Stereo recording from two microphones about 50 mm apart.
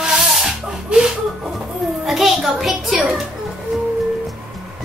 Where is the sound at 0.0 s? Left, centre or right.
Centre.